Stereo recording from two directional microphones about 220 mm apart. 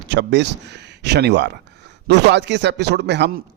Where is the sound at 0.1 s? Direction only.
50° right (ahead or behind).